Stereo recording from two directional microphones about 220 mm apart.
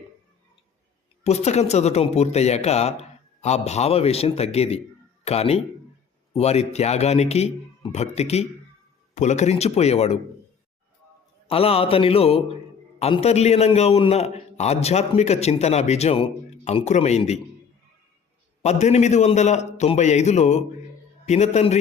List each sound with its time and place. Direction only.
1.2 s a man's voice: 30° left (ahead or behind)
11.4 s a man's voice: 25° left (ahead or behind)
18.6 s a man's voice: 30° left (ahead or behind)